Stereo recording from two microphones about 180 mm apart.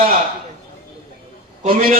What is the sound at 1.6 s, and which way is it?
Speech, 50° right (ahead or behind).